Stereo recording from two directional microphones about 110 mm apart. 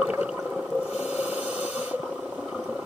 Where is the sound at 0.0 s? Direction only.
10° right (ahead or behind).